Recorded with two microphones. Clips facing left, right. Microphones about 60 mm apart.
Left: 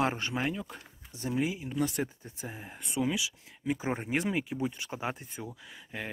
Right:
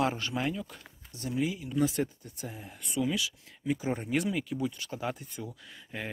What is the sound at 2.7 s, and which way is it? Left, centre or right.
Speech, left.